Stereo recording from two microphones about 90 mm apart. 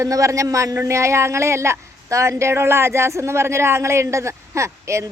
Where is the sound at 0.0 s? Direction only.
35° right (ahead or behind).